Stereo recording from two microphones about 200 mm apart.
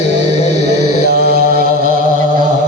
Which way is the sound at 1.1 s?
50° right (ahead or behind).